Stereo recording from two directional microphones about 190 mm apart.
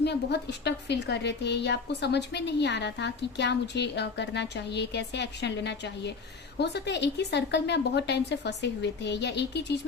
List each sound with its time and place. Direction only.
0.0 s a woman's voice: 60° left (ahead or behind)